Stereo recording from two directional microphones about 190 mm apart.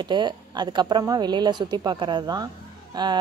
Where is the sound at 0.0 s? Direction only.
25° right (ahead or behind).